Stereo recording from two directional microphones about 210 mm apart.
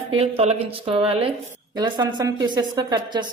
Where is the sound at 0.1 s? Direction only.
30° right (ahead or behind).